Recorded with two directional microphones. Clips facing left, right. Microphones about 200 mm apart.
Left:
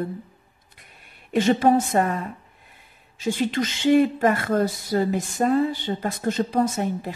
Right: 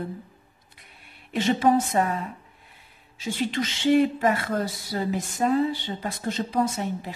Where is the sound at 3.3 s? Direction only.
45° left (ahead or behind).